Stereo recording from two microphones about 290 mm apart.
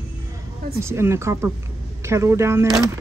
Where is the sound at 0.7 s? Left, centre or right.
Centre.